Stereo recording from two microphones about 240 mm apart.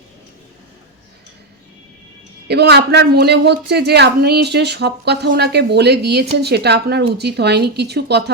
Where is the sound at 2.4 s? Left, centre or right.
Right.